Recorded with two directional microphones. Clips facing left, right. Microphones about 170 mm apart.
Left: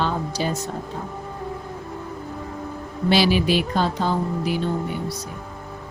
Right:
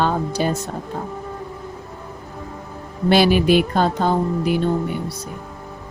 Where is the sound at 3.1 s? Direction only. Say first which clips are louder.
Right 4 dB; 50° right (ahead or behind).